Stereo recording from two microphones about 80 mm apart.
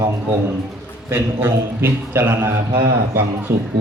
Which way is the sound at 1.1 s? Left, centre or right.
Right.